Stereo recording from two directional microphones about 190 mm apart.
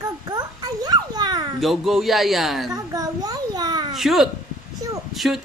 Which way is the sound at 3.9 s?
Centre (ahead or behind).